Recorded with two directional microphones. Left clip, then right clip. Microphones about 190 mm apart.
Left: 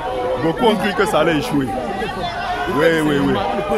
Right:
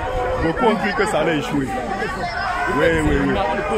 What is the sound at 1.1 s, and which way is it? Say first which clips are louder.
Speech: left 6 dB; 20° left (ahead or behind).